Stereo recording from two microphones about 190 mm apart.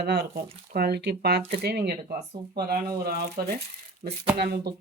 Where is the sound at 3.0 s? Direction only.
55° right (ahead or behind).